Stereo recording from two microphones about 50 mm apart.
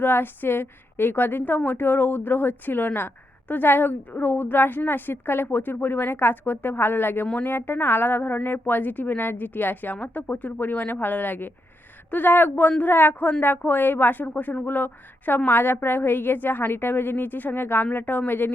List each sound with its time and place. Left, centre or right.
0.0 s a woman's voice: left